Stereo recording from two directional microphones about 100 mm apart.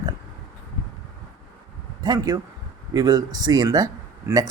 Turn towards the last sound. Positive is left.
turn(degrees=-40)  # may be behind; listen again after turning